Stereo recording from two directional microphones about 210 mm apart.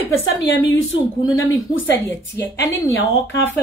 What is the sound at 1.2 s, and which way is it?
Speech, 15° left (ahead or behind).